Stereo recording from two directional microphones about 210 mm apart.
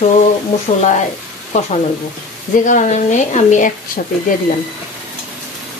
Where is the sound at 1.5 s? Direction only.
35° left (ahead or behind).